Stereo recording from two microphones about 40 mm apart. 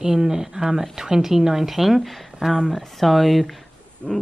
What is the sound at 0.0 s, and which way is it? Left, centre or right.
A woman's voice, centre.